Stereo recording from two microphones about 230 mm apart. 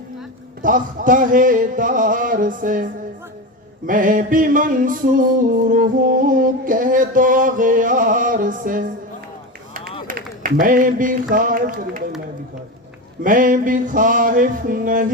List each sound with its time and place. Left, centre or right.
0.6 s music: right
10.1 s a sound: right
13.2 s music: right